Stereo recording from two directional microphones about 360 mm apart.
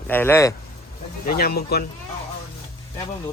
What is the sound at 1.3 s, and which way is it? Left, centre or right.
Speech, left.